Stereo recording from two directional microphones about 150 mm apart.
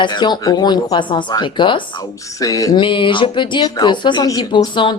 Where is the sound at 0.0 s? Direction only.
30° left (ahead or behind).